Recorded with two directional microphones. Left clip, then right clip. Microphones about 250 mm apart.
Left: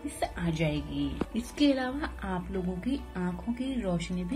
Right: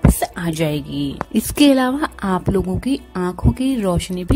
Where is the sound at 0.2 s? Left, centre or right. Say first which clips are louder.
Right 11 dB; right.